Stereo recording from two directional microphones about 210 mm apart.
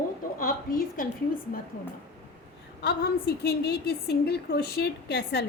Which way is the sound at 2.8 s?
50° left (ahead or behind).